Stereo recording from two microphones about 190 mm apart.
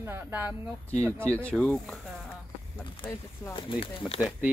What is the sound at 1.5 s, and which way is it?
Speech, 5° left (ahead or behind).